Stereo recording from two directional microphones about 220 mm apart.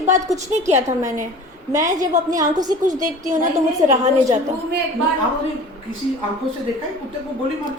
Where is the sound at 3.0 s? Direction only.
35° right (ahead or behind).